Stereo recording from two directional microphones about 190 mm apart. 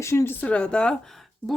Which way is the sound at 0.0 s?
15° left (ahead or behind).